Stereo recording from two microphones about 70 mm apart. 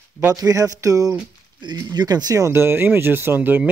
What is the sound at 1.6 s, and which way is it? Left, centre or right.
Speech, right.